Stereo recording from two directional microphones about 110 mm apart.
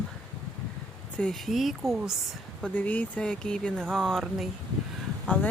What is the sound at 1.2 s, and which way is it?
Speech, 5° left (ahead or behind).